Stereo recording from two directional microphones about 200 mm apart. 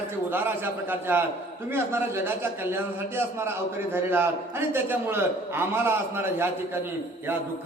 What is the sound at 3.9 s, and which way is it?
A man's voice, 10° right (ahead or behind).